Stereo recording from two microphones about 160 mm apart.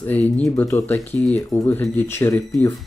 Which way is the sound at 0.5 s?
15° left (ahead or behind).